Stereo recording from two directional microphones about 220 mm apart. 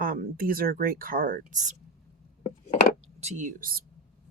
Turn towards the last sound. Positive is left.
turn(degrees=-40)  # may be behind; listen again after turning